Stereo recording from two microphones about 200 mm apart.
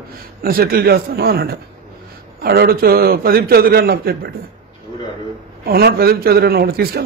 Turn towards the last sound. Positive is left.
turn(degrees=-50)  # may be behind; listen again after turning